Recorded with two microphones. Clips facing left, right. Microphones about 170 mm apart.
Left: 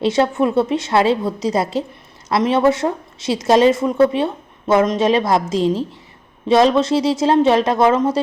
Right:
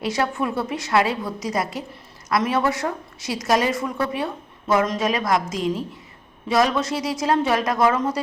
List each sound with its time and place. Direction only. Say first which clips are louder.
0.0 s a woman's voice: left 7 dB; 25° left (ahead or behind)